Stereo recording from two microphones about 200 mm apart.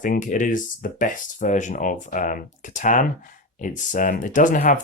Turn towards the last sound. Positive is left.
turn(degrees=40)  # may be behind; listen again after turning